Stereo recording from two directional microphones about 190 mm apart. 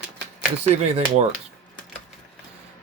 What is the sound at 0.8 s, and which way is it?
Speech, 35° right (ahead or behind).